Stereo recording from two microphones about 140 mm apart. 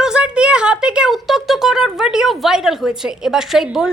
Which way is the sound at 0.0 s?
5° right (ahead or behind).